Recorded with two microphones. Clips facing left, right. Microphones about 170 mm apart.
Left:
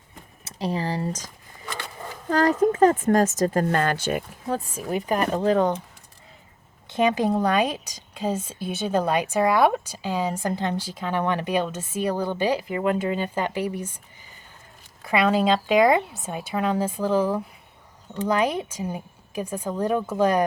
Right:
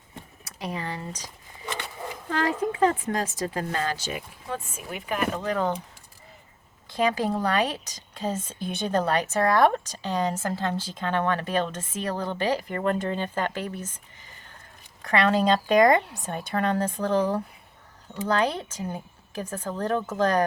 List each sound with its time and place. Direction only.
0.4 s speech: 30° left (ahead or behind)
1.6 s a sound: 20° right (ahead or behind)
2.3 s speech: 40° left (ahead or behind)
4.4 s speech: 40° left (ahead or behind)
6.9 s speech: 20° left (ahead or behind)
15.0 s speech: 10° left (ahead or behind)